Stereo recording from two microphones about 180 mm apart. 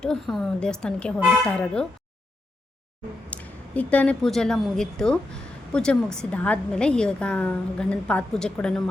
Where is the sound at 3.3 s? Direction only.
10° left (ahead or behind).